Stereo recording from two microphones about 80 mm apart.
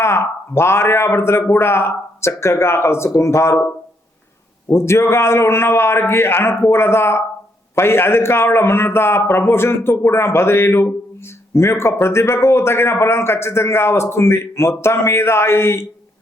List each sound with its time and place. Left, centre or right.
0.0 s a man's voice: left
4.7 s a man's voice: left